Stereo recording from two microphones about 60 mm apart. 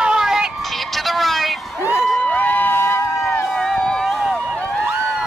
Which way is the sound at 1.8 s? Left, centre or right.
Left.